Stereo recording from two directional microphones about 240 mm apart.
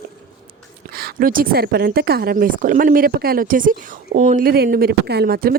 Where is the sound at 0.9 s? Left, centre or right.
Right.